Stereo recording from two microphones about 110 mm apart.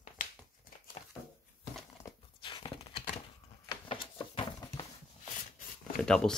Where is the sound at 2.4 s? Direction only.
45° left (ahead or behind).